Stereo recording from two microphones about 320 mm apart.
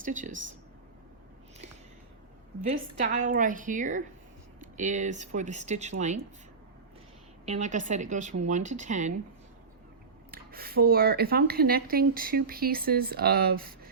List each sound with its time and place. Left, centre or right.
0.0 s speech: right
2.7 s speech: right
7.4 s speech: right
10.3 s speech: right